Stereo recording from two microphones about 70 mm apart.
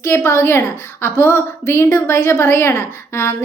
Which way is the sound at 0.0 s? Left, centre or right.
Left.